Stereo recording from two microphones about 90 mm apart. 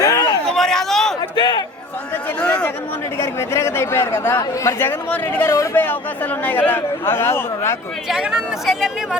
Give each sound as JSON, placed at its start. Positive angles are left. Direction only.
{"t": 0.0, "sound": "a sound", "side_deg": 40}
{"t": 0.4, "sound": "chatter", "side_deg": 5}
{"t": 1.4, "sound": "speech", "side_deg": 50}
{"t": 2.4, "sound": "a man's voice", "side_deg": 15}
{"t": 3.2, "sound": "speech", "side_deg": 30}
{"t": 8.0, "sound": "speech", "side_deg": -5}